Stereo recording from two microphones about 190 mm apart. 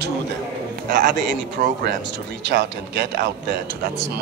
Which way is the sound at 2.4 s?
65° right (ahead or behind).